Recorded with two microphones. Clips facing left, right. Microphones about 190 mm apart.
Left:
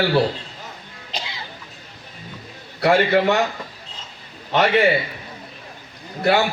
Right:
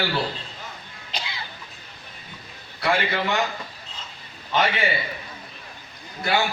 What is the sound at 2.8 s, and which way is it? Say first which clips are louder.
Speech: left 8 dB; 65° left (ahead or behind).